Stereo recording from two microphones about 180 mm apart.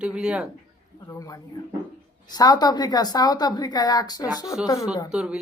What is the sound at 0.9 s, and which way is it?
A woman's voice, 20° left (ahead or behind).